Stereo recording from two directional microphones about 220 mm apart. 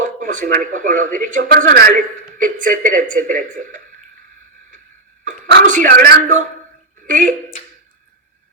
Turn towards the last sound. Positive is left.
turn(degrees=-35)  # may be behind; listen again after turning